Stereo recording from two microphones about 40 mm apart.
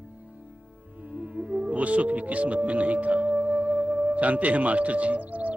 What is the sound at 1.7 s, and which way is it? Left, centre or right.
Speech, right.